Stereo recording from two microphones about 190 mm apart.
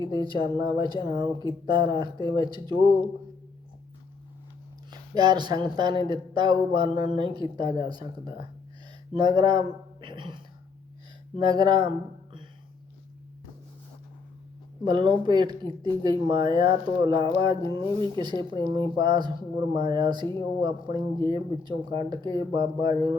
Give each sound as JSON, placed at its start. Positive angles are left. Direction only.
{"t": 0.0, "sound": "speech", "side_deg": -20}
{"t": 4.9, "sound": "speech", "side_deg": -20}
{"t": 9.1, "sound": "a sound", "side_deg": -20}
{"t": 11.3, "sound": "speech", "side_deg": -20}
{"t": 14.8, "sound": "speech", "side_deg": -25}